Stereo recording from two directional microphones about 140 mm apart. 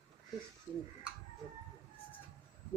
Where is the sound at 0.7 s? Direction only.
10° left (ahead or behind).